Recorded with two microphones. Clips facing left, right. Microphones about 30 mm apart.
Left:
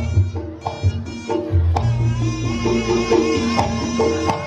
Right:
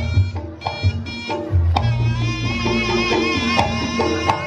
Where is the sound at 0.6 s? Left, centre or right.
Right.